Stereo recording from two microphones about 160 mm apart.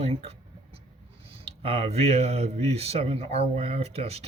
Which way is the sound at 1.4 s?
40° right (ahead or behind).